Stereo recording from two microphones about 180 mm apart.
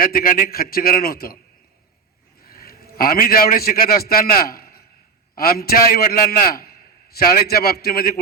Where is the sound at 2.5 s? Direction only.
55° left (ahead or behind).